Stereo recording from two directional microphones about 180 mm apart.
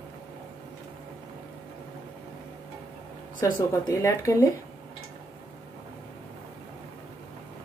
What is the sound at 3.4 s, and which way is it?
Speech, 15° left (ahead or behind).